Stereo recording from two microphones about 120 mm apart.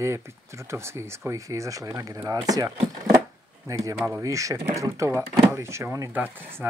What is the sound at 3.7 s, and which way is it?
Speech, 25° right (ahead or behind).